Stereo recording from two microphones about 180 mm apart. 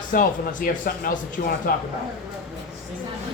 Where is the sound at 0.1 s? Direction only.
50° left (ahead or behind).